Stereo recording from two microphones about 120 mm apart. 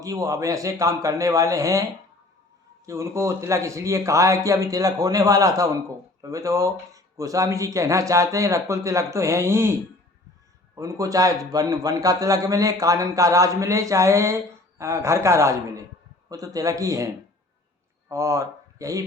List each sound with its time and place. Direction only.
0.0 s a man's voice: 25° right (ahead or behind)
10.8 s a man's voice: 25° right (ahead or behind)
18.1 s speech: 25° right (ahead or behind)